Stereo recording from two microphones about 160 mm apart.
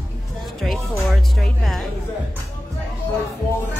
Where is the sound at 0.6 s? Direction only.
Centre (ahead or behind).